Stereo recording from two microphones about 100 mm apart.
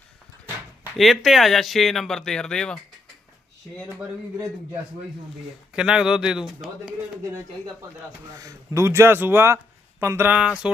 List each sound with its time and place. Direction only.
0.9 s speech: centre (ahead or behind)
5.7 s speech: 10° right (ahead or behind)
8.3 s speech: 35° right (ahead or behind); by 10.5 s 15° right (ahead or behind)